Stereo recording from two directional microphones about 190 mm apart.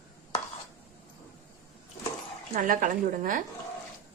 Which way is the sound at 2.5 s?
45° right (ahead or behind).